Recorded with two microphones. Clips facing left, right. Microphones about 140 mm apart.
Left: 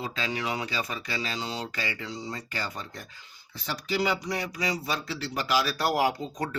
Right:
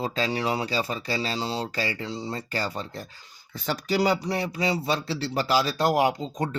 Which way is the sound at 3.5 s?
50° right (ahead or behind).